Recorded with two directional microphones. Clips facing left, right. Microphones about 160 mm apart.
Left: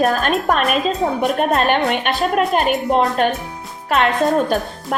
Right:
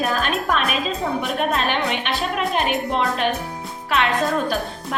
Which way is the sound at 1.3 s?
50° left (ahead or behind).